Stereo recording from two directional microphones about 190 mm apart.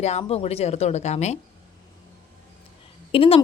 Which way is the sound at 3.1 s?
30° left (ahead or behind).